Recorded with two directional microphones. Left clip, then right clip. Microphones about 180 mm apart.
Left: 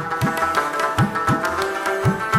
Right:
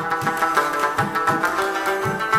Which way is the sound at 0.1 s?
40° right (ahead or behind).